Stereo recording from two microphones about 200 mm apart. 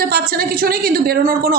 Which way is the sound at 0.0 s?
50° right (ahead or behind).